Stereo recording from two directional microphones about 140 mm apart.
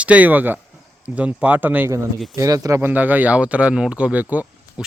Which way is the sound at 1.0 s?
10° right (ahead or behind).